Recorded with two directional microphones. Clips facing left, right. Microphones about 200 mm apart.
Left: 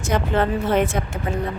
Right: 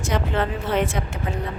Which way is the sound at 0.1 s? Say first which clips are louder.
Left 4 dB; 45° left (ahead or behind).